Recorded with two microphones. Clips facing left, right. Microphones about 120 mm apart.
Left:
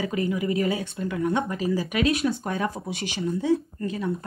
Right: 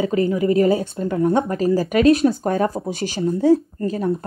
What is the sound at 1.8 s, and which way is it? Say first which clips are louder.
Speech: right 8 dB; 50° right (ahead or behind).